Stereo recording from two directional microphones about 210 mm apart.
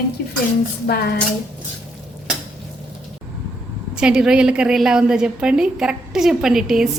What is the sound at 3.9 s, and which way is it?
A woman's voice, 5° right (ahead or behind).